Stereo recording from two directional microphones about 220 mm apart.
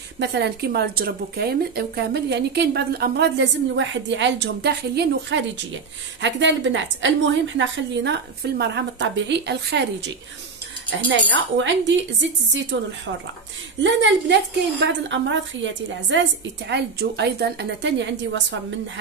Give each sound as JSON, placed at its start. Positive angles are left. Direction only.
{"t": 0.2, "sound": "a woman's voice", "side_deg": -50}